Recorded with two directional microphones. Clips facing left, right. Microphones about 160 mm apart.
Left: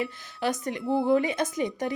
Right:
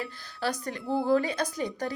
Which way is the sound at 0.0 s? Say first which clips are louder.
Left 3 dB; 20° left (ahead or behind).